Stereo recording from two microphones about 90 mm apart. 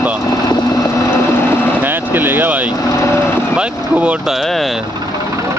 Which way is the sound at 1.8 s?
20° right (ahead or behind).